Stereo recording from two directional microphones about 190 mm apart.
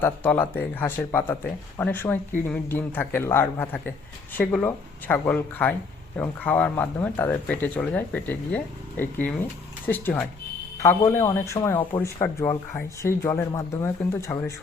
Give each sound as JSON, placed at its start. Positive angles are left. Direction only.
{"t": 0.0, "sound": "speech", "side_deg": 10}